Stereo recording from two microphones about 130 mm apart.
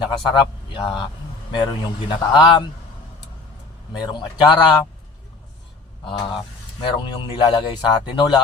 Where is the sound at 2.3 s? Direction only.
35° left (ahead or behind).